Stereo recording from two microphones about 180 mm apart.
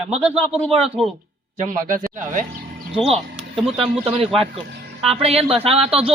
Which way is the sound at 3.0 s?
30° right (ahead or behind).